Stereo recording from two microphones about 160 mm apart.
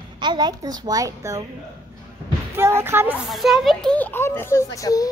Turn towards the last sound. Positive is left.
turn(degrees=20)  # may be behind; listen again after turning